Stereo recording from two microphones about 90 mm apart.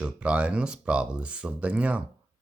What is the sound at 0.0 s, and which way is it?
Speech, 10° right (ahead or behind).